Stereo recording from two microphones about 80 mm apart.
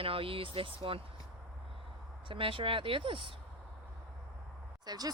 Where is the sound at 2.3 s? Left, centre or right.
Right.